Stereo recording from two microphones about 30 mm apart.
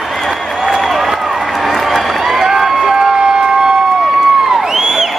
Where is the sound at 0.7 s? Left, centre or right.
Centre.